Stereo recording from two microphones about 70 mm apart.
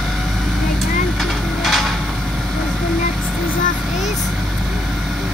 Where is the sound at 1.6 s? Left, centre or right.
Centre.